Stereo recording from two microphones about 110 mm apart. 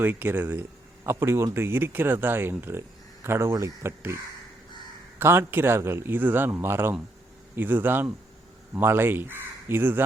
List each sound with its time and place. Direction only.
0.0 s speech: 20° right (ahead or behind)
5.2 s speech: 20° right (ahead or behind)